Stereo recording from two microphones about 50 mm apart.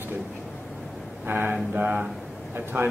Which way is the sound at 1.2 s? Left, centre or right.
Right.